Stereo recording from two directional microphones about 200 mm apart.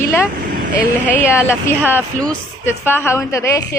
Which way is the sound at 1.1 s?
10° left (ahead or behind).